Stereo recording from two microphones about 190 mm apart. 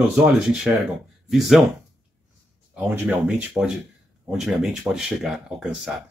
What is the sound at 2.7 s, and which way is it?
Speech, 5° right (ahead or behind).